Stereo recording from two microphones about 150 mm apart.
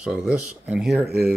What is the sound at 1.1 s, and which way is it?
Speech, 90° right.